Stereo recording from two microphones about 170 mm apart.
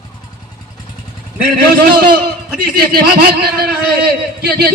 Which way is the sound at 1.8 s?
60° right (ahead or behind).